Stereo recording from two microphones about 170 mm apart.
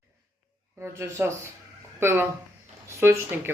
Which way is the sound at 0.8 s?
15° right (ahead or behind).